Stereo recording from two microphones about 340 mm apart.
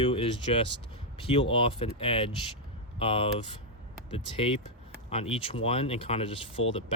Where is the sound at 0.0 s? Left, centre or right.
Centre.